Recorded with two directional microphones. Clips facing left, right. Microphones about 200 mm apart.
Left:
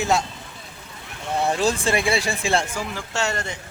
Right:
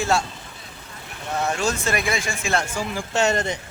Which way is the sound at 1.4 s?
30° left (ahead or behind).